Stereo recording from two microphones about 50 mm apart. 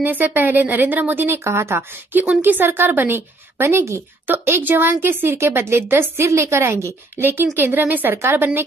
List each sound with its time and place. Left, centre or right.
0.0 s speech: right
1.4 s a woman's voice: right
2.1 s a woman's voice: right
4.3 s a woman's voice: right
6.2 s a woman's voice: right
7.2 s a woman's voice: right